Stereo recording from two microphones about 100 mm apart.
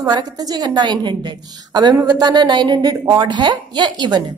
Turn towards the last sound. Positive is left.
turn(degrees=-45)  # may be behind; listen again after turning